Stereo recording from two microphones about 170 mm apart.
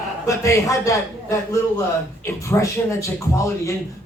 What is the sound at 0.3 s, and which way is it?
Speech, 20° left (ahead or behind).